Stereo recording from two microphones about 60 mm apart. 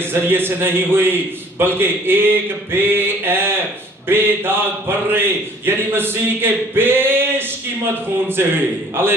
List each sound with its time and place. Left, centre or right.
0.0 s a man's voice: right